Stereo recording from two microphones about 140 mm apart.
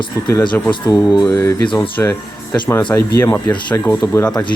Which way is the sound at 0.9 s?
25° left (ahead or behind).